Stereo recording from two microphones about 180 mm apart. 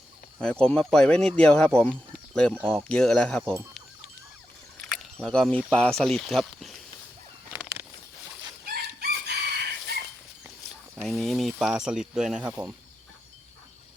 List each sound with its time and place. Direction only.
0.6 s speech: 5° left (ahead or behind)
5.1 s speech: 5° left (ahead or behind)
7.5 s a sound: 15° right (ahead or behind)
8.7 s chicken: 65° right (ahead or behind)
11.1 s speech: centre (ahead or behind)